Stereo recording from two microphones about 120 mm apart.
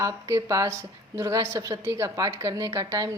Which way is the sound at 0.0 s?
25° right (ahead or behind).